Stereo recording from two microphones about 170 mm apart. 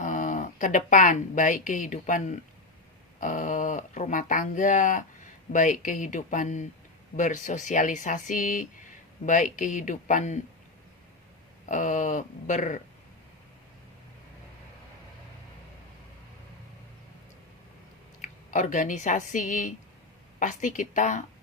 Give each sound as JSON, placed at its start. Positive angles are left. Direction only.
{"t": 0.0, "sound": "speech", "side_deg": 50}
{"t": 11.7, "sound": "speech", "side_deg": 50}
{"t": 18.2, "sound": "speech", "side_deg": 50}